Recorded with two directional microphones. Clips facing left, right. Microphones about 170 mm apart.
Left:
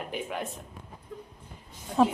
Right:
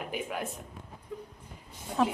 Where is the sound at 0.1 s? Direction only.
5° right (ahead or behind).